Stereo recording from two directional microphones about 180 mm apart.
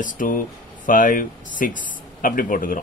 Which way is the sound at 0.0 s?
50° left (ahead or behind).